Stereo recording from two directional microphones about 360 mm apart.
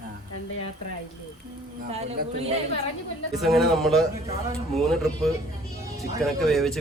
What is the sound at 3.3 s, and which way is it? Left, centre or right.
Speech, centre.